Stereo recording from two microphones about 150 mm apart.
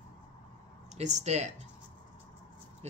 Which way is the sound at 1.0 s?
50° right (ahead or behind).